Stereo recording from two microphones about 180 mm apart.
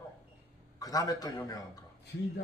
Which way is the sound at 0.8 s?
20° left (ahead or behind).